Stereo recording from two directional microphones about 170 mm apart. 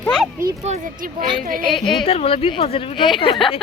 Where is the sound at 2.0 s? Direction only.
35° left (ahead or behind).